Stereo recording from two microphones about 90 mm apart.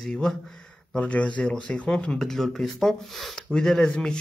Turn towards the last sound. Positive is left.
turn(degrees=5)  # may be behind; listen again after turning